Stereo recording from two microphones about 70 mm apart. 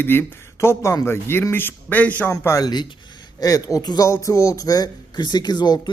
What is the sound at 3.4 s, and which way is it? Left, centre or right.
Speech, left.